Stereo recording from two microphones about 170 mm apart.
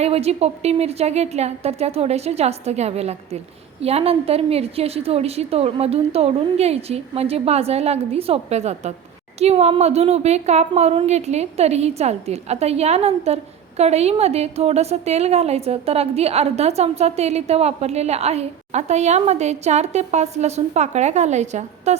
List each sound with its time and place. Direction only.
0.0 s a woman's voice: 35° right (ahead or behind)